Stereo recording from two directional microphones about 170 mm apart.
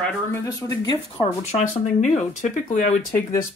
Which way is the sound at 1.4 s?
45° left (ahead or behind).